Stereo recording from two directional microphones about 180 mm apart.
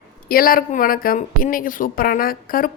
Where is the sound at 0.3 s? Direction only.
55° left (ahead or behind).